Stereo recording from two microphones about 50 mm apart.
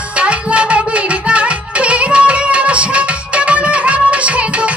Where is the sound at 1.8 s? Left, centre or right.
Right.